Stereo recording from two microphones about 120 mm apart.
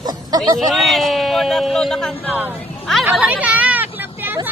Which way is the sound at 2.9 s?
5° right (ahead or behind).